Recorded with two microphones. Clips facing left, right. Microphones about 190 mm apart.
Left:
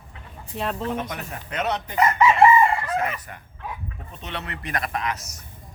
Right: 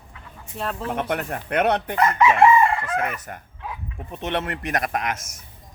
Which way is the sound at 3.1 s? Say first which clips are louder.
Right 3 dB; 45° right (ahead or behind).